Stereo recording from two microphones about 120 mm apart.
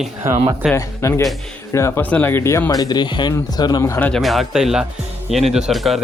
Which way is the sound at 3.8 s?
20° left (ahead or behind).